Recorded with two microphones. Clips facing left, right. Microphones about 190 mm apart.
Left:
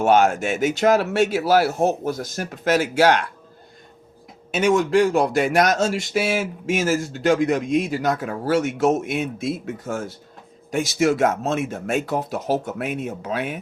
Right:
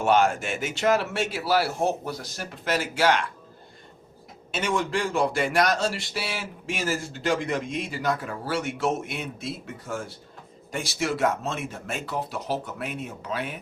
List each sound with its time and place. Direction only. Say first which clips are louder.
0.0 s speech: left 5 dB; 45° left (ahead or behind)
4.5 s speech: left 9 dB; 45° left (ahead or behind)